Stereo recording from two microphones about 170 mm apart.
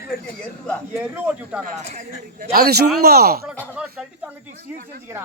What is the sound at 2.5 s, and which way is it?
Speech, 65° right (ahead or behind).